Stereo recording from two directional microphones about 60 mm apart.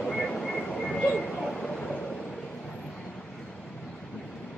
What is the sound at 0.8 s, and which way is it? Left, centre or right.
Vehicle, centre.